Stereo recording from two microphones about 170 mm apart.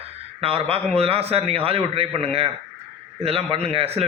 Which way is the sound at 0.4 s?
35° right (ahead or behind).